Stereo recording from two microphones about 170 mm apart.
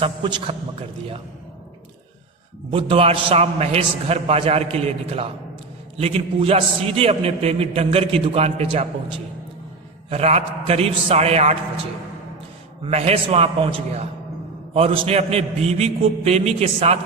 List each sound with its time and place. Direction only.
0.0 s a man's voice: 25° right (ahead or behind)
2.7 s a man's voice: 35° right (ahead or behind)
12.8 s a man's voice: 35° right (ahead or behind)